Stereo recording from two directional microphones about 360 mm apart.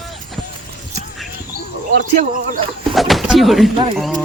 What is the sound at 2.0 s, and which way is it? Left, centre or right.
Speech, right.